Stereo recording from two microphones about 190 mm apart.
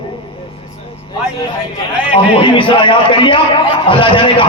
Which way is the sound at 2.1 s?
25° left (ahead or behind).